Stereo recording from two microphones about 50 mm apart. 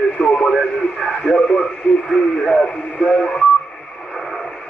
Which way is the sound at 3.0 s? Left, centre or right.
Left.